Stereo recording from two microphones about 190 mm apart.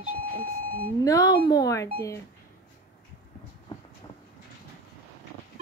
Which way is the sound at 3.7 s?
25° left (ahead or behind).